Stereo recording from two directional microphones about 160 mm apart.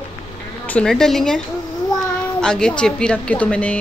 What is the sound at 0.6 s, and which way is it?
Speech, 5° left (ahead or behind).